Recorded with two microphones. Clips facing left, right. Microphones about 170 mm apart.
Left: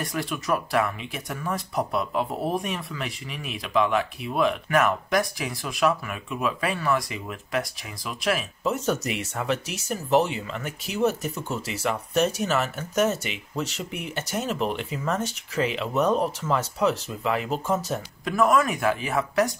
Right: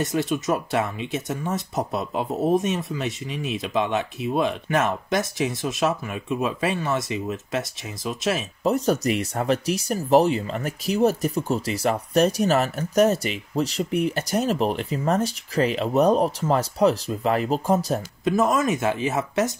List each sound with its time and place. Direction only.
0.0 s speech: 20° right (ahead or behind)
8.6 s speech: 35° right (ahead or behind)
18.2 s speech: 20° right (ahead or behind)